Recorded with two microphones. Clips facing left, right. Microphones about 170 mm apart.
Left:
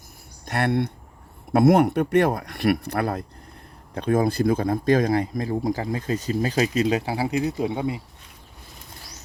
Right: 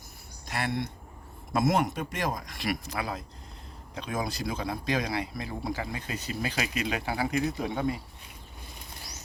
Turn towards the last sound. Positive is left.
turn(degrees=20)  # may be behind; listen again after turning